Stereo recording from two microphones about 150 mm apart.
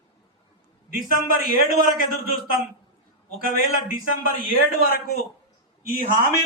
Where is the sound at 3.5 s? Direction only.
70° left (ahead or behind).